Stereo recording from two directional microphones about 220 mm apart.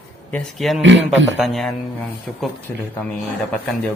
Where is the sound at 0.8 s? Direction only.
55° right (ahead or behind).